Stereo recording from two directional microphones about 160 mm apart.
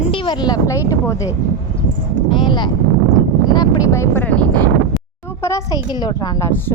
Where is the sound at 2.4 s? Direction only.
30° left (ahead or behind).